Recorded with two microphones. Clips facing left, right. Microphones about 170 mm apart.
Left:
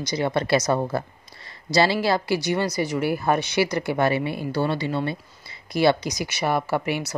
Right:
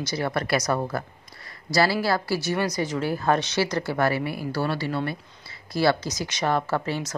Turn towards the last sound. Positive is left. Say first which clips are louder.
# left 2 dB
turn(degrees=15)  # may be behind; listen again after turning